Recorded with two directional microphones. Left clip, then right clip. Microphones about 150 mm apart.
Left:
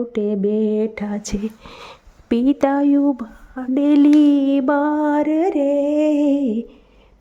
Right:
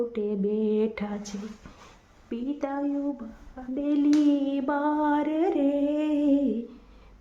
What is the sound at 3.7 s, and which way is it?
Speech, 90° left.